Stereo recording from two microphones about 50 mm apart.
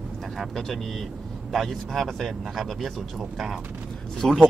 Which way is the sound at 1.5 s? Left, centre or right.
Centre.